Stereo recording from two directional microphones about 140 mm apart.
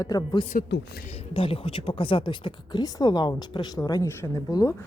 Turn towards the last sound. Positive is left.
turn(degrees=25)  # may be behind; listen again after turning